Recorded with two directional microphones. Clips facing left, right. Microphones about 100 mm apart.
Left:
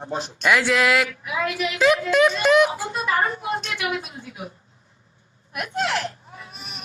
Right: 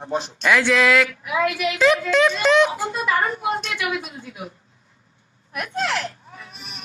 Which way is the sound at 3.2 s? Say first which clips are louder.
Right 1 dB; 30° right (ahead or behind).